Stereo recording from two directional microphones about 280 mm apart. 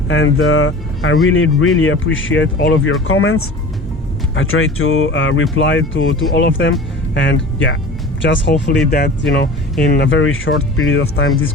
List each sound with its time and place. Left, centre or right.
0.1 s speech: left